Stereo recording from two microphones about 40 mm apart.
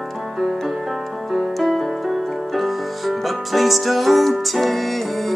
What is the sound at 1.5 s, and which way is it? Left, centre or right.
Music, centre.